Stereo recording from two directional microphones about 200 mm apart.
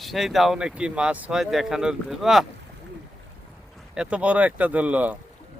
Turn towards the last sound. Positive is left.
turn(degrees=-5)  # may be behind; listen again after turning